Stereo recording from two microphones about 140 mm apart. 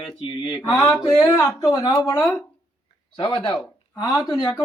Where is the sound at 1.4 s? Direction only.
25° left (ahead or behind).